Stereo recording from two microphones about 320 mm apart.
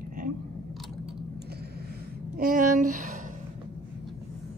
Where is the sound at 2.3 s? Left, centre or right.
Right.